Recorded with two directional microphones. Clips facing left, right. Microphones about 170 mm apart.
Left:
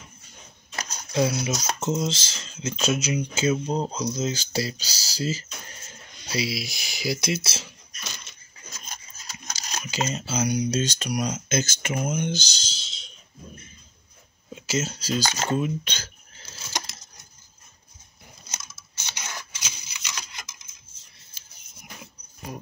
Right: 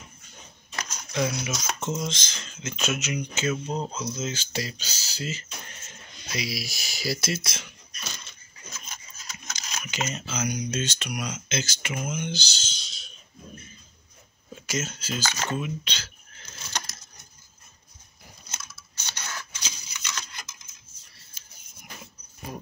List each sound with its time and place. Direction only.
0.7 s a sound: 30° left (ahead or behind)
1.9 s speech: 25° left (ahead or behind)
8.8 s speech: 35° left (ahead or behind)
14.5 s speech: 30° left (ahead or behind)
15.8 s speech: 50° left (ahead or behind)
16.7 s a sound: 10° left (ahead or behind)
18.5 s computer keyboard: 20° left (ahead or behind)